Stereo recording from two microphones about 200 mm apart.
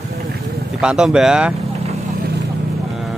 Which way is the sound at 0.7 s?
5° right (ahead or behind).